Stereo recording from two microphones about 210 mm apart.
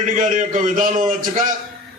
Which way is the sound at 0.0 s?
40° right (ahead or behind).